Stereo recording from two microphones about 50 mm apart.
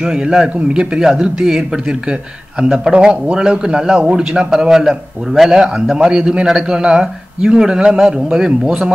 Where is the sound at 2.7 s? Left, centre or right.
Centre.